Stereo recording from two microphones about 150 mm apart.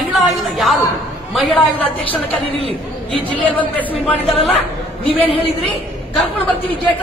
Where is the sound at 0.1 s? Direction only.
Centre (ahead or behind).